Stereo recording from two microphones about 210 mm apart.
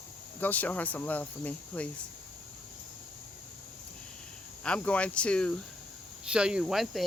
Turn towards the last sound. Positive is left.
turn(degrees=0)  # may be behind; listen again after turning